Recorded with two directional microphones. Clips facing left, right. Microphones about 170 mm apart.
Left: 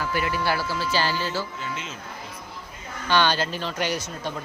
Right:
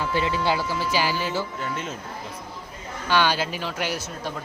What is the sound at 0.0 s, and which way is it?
Speech, 25° right (ahead or behind).